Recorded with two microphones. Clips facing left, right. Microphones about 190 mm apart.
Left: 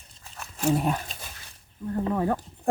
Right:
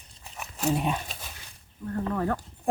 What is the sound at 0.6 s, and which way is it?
Speech, centre (ahead or behind).